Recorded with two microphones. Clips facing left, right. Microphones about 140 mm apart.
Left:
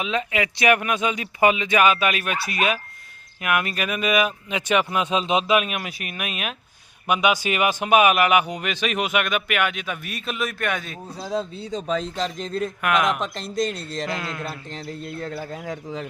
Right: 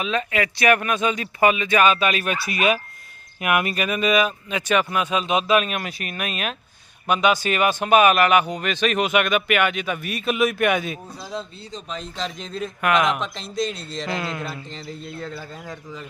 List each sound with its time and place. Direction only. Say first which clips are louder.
0.0 s speech: right 1 dB; 15° left (ahead or behind); by 3.8 s 10° right (ahead or behind)
3.8 s speech: right 1 dB; 5° left (ahead or behind); by 5.5 s 25° left (ahead or behind)
5.5 s speech: right 1 dB; 10° left (ahead or behind); by 10.9 s 10° right (ahead or behind)
11.2 s speech: left 5 dB; 45° left (ahead or behind)
12.8 s speech: right 2 dB; centre (ahead or behind)
13.1 s speech: left 1 dB; 40° left (ahead or behind)
14.1 s speech: right 2 dB; centre (ahead or behind)
14.4 s speech: even; 50° left (ahead or behind)
15.6 s speech: left 5 dB; 65° left (ahead or behind)